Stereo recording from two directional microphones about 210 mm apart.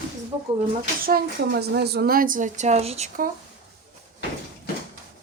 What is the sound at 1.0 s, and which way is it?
Speech, 50° right (ahead or behind).